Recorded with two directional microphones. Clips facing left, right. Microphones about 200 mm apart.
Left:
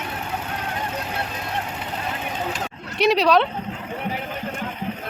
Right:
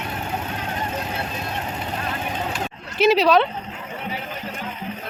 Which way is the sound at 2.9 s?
Centre (ahead or behind).